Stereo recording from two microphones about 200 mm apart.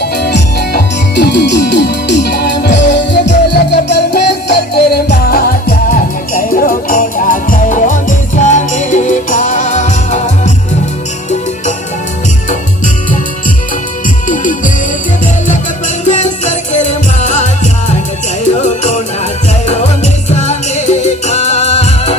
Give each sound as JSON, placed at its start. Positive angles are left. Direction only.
{"t": 0.0, "sound": "music", "side_deg": 55}
{"t": 12.4, "sound": "music", "side_deg": 40}
{"t": 14.2, "sound": "music", "side_deg": 40}
{"t": 16.1, "sound": "music", "side_deg": 35}